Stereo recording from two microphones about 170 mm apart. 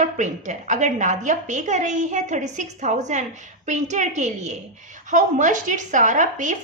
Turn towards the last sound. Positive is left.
turn(degrees=-45)  # may be behind; listen again after turning